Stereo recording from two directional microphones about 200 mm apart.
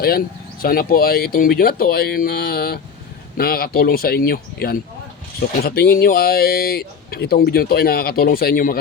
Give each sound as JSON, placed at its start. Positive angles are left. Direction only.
{"t": 0.6, "sound": "a man's voice", "side_deg": 45}